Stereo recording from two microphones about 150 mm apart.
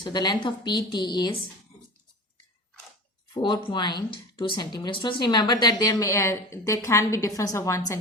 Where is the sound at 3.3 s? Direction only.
30° left (ahead or behind).